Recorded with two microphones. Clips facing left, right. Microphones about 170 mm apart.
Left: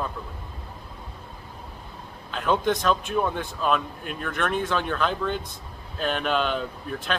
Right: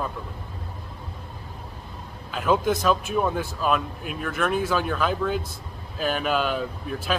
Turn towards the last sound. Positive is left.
turn(degrees=-5)  # may be behind; listen again after turning